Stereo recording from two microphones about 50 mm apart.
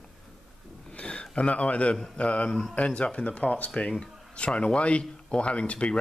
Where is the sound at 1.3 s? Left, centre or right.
Left.